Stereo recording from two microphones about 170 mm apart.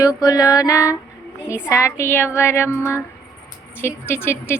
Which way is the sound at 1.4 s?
15° left (ahead or behind).